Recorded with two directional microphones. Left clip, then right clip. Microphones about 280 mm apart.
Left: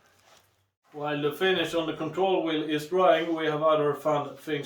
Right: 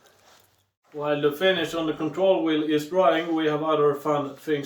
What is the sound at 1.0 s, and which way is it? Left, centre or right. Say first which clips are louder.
Speech: right 5 dB; centre.